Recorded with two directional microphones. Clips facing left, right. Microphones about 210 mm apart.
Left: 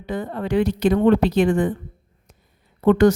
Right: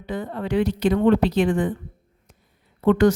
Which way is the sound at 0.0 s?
45° left (ahead or behind).